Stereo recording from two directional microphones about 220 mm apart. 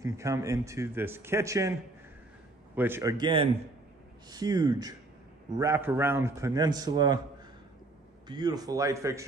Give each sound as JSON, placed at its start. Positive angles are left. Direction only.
{"t": 0.0, "sound": "a man's voice", "side_deg": -15}
{"t": 8.3, "sound": "a man's voice", "side_deg": -20}